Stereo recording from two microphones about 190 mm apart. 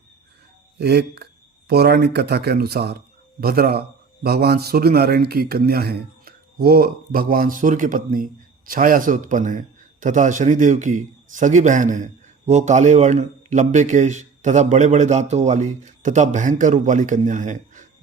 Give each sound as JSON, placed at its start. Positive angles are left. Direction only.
{"t": 0.8, "sound": "a man's voice", "side_deg": -60}